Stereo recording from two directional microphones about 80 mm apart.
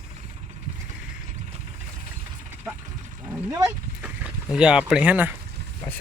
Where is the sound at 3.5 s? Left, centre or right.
Right.